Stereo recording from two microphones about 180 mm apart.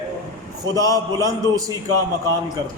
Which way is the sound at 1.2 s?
20° right (ahead or behind).